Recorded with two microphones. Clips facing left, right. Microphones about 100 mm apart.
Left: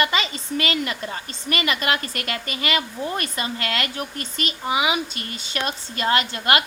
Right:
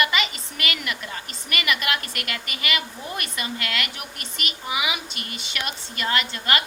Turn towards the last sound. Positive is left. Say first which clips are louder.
# left 4 dB
turn(degrees=40)  # may be behind; listen again after turning